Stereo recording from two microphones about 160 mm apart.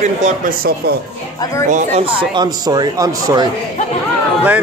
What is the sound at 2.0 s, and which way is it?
Speech, 30° right (ahead or behind).